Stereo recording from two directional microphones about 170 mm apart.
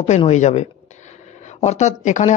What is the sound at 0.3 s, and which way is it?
A woman's voice, 40° left (ahead or behind).